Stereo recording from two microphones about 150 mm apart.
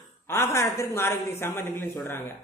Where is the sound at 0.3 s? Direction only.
20° left (ahead or behind).